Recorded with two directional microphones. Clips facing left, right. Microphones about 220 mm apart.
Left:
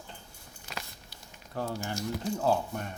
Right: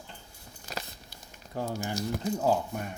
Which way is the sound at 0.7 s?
40° right (ahead or behind).